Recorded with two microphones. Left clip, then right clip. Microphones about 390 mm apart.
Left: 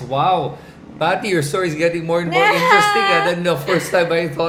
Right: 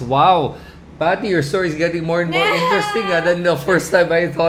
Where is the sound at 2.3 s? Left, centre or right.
Left.